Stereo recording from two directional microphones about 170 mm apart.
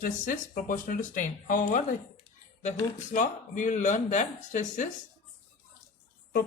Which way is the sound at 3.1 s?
50° left (ahead or behind).